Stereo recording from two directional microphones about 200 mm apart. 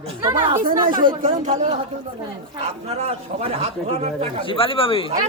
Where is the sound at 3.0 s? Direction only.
30° right (ahead or behind).